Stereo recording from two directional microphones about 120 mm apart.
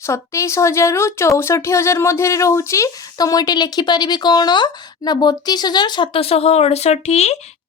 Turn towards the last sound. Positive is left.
turn(degrees=65)  # may be behind; listen again after turning